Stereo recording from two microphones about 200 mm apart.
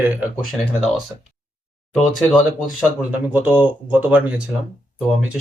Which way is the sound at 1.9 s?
Centre (ahead or behind).